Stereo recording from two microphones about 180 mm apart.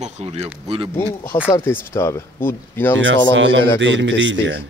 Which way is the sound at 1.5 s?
15° left (ahead or behind).